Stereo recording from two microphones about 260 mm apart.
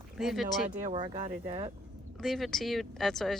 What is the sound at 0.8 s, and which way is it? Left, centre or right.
Speech, right.